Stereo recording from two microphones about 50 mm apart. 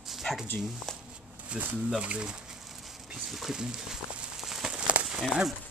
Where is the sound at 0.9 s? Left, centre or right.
Centre.